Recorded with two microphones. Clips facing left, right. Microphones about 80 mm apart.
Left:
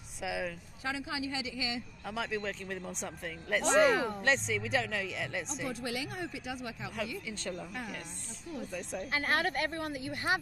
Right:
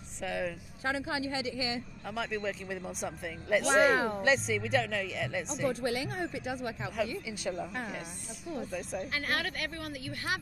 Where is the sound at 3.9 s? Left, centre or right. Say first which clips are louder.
Right 2 dB; right.